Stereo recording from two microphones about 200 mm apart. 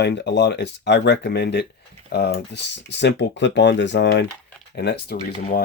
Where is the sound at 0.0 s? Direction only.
60° left (ahead or behind).